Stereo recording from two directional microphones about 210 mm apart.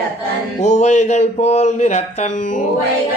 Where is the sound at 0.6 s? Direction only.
35° left (ahead or behind).